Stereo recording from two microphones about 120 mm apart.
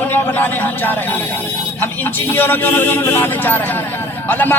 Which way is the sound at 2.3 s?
15° left (ahead or behind).